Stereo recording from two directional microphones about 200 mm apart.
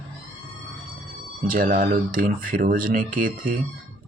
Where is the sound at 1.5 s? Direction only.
45° right (ahead or behind).